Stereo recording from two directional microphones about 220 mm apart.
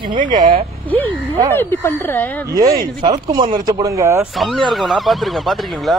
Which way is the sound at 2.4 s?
15° right (ahead or behind).